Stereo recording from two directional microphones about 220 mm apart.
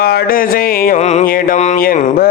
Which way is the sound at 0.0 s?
40° left (ahead or behind).